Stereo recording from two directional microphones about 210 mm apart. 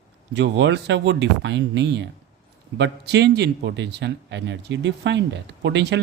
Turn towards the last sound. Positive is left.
turn(degrees=-55)  # may be behind; listen again after turning